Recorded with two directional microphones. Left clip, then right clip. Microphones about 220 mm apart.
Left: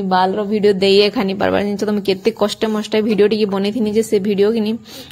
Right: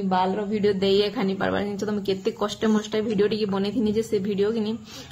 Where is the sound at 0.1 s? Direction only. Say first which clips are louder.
Left 8 dB; 35° left (ahead or behind).